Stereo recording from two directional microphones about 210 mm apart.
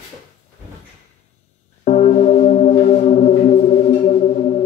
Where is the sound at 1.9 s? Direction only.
35° left (ahead or behind).